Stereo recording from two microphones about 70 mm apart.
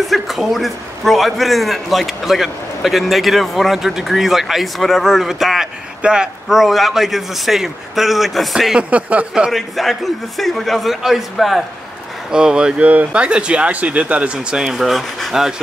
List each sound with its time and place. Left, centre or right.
0.0 s a man's voice: centre
8.7 s speech: centre
9.5 s a man's voice: centre
12.3 s speech: centre